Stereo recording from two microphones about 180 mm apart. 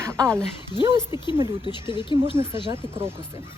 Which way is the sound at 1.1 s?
25° left (ahead or behind).